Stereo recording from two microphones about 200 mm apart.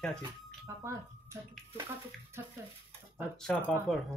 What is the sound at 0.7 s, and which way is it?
Speech, 15° right (ahead or behind).